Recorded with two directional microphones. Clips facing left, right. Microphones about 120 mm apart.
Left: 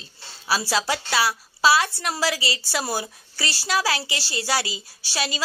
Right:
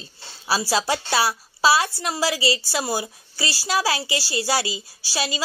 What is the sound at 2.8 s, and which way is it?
A woman's voice, 20° right (ahead or behind).